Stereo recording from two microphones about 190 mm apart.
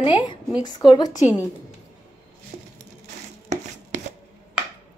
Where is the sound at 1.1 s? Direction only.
10° right (ahead or behind).